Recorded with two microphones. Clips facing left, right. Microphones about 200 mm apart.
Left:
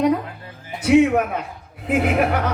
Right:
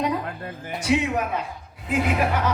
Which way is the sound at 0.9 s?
55° left (ahead or behind).